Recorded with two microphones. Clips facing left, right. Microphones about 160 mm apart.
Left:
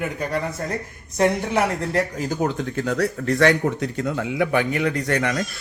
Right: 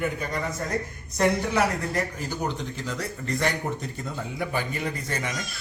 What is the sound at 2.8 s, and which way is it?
Speech, 70° left (ahead or behind).